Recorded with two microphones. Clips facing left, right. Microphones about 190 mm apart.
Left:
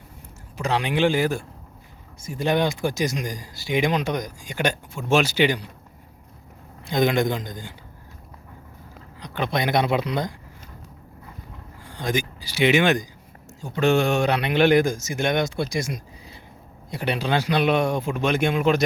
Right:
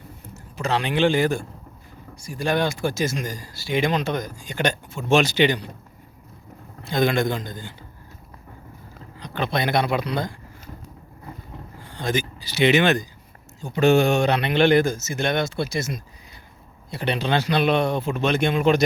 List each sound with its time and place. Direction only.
0.5 s speech: 15° left (ahead or behind)
2.2 s speech: 20° left (ahead or behind)
6.8 s speech: 15° left (ahead or behind)
9.2 s speech: 15° left (ahead or behind)
11.9 s speech: 10° left (ahead or behind)
13.7 s speech: 5° right (ahead or behind)